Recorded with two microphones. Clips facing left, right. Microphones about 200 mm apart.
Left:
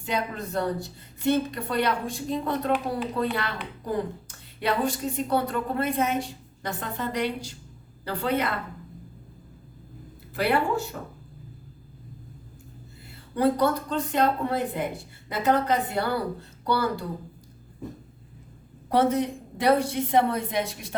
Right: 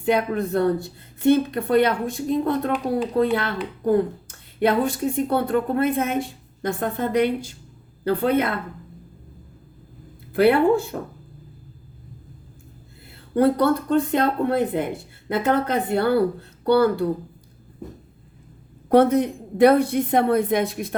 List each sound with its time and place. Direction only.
0.1 s a woman's voice: 55° right (ahead or behind)
10.3 s a woman's voice: 55° right (ahead or behind)
13.3 s a woman's voice: 60° right (ahead or behind)
18.9 s a woman's voice: 55° right (ahead or behind)